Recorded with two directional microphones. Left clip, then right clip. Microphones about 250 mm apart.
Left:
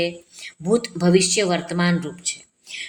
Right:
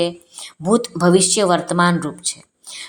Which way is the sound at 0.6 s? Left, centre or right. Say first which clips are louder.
Right 4 dB; centre.